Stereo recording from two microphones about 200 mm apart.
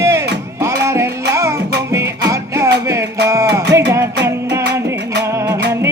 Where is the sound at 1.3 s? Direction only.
15° right (ahead or behind).